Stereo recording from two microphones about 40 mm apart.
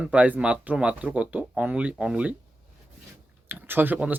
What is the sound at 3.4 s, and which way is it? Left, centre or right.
Speech, right.